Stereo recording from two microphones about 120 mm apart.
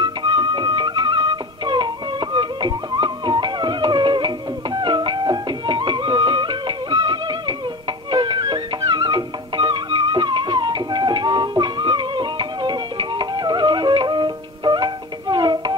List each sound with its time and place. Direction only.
0.0 s music: 40° right (ahead or behind)